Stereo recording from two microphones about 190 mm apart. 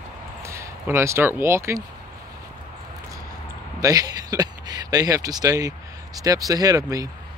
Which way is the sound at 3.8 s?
20° right (ahead or behind).